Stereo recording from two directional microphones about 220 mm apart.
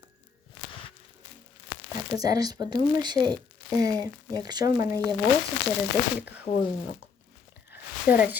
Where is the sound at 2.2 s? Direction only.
15° right (ahead or behind).